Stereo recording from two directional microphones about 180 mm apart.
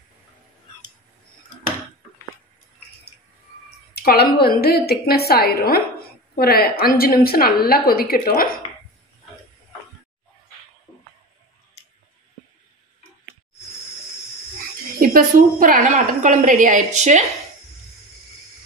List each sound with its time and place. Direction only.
3.9 s a woman's voice: 60° left (ahead or behind)
10.9 s music: centre (ahead or behind)
15.0 s a woman's voice: 50° right (ahead or behind)